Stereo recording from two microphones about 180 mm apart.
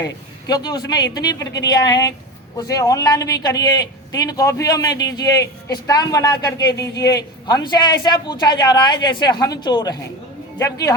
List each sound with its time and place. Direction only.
0.0 s a man's voice: 20° left (ahead or behind)